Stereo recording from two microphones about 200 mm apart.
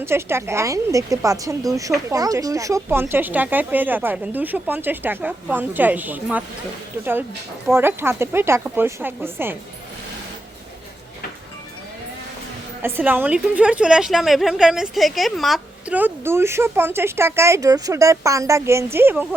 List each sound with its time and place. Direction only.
0.0 s a woman's voice: 10° right (ahead or behind)
12.8 s a woman's voice: 10° right (ahead or behind)